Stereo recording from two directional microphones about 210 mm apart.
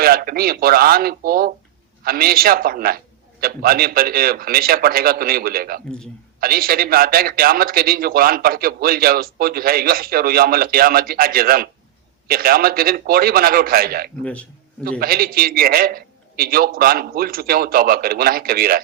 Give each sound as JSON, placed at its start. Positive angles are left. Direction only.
{"t": 0.0, "sound": "a man's voice", "side_deg": -45}
{"t": 14.2, "sound": "a man's voice", "side_deg": 5}
{"t": 14.8, "sound": "a man's voice", "side_deg": -45}